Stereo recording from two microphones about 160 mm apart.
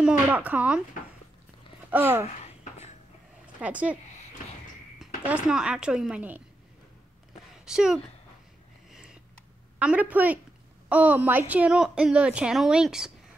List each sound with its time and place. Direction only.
0.0 s speech: 10° right (ahead or behind)
1.9 s speech: 10° right (ahead or behind)
2.2 s a sound: 40° left (ahead or behind)
3.6 s speech: 10° right (ahead or behind)
7.6 s a woman's voice: 5° right (ahead or behind)
8.9 s a sound: 5° right (ahead or behind)
9.8 s a woman's voice: 10° right (ahead or behind)